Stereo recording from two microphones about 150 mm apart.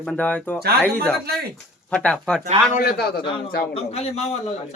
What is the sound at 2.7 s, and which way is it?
Speech, 90° left.